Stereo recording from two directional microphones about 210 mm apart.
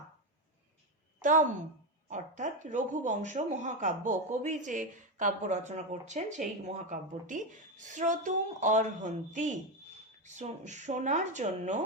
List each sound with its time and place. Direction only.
1.2 s a woman's voice: 35° right (ahead or behind)